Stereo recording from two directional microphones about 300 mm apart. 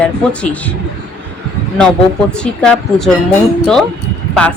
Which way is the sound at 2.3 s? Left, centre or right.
Centre.